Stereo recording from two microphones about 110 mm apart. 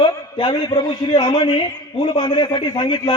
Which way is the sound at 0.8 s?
45° left (ahead or behind).